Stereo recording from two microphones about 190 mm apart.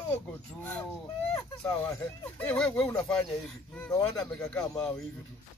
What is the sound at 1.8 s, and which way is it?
Speech, 5° left (ahead or behind).